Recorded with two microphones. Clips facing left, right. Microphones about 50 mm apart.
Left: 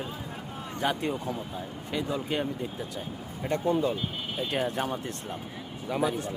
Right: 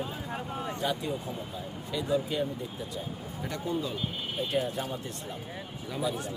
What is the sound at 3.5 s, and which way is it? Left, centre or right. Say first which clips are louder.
Speech: left 7 dB; left.